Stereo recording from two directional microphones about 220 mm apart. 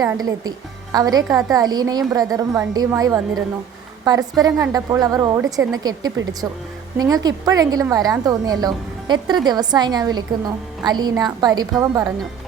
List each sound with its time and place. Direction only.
0.0 s a woman's voice: 15° right (ahead or behind)